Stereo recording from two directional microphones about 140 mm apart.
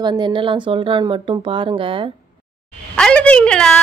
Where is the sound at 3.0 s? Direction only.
10° left (ahead or behind).